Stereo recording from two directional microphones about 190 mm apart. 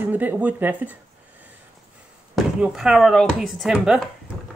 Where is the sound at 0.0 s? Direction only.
10° right (ahead or behind).